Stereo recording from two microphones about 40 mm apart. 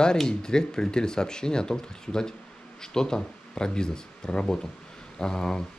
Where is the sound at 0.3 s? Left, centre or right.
Centre.